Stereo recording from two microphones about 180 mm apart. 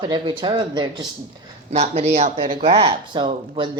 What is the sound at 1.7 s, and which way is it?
Speech, 35° right (ahead or behind).